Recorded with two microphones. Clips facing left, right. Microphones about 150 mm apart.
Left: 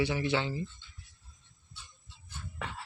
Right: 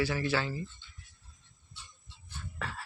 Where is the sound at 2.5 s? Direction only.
20° left (ahead or behind).